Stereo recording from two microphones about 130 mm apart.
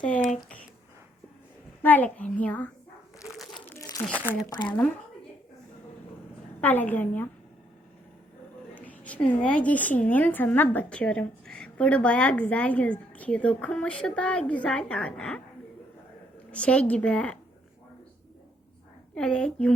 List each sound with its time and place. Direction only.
0.1 s speech: 70° left (ahead or behind)
1.8 s a woman's voice: 15° left (ahead or behind)
3.2 s crumpling: centre (ahead or behind)
3.8 s crumpling: 30° left (ahead or behind)
4.4 s speech: 30° left (ahead or behind)
6.6 s a woman's voice: 10° left (ahead or behind)
8.7 s a woman's voice: 10° left (ahead or behind)
16.5 s a woman's voice: 10° left (ahead or behind)
19.1 s a woman's voice: 5° left (ahead or behind)